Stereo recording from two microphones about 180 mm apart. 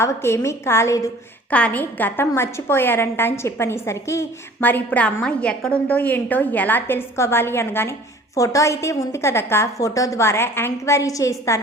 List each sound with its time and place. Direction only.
0.0 s a woman's voice: 15° left (ahead or behind)